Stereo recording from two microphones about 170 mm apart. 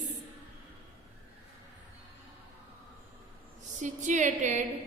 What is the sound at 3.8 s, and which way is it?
Speech, 45° right (ahead or behind).